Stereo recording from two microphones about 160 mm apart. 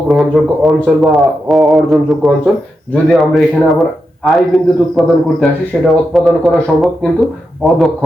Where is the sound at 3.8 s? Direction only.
Centre (ahead or behind).